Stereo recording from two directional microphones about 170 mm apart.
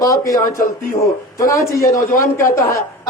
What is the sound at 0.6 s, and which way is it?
Speech, 55° left (ahead or behind).